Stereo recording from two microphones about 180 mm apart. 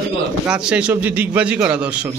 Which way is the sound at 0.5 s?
5° right (ahead or behind).